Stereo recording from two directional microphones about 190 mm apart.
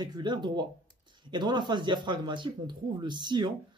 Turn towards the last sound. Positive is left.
turn(degrees=-25)  # may be behind; listen again after turning